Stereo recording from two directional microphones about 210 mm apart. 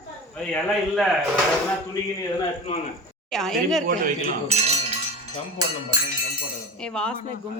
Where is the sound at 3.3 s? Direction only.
Centre (ahead or behind).